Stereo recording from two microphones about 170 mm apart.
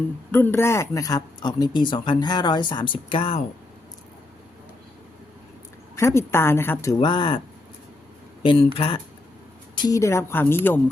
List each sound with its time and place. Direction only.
0.3 s speech: 15° left (ahead or behind); by 3.4 s 35° left (ahead or behind)
6.0 s a woman's voice: 15° left (ahead or behind)
7.0 s speech: 30° left (ahead or behind)
8.4 s a woman's voice: 30° left (ahead or behind); by 10.8 s 10° left (ahead or behind)